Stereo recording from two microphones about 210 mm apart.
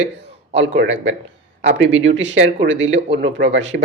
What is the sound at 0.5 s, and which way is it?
Speech, 55° right (ahead or behind).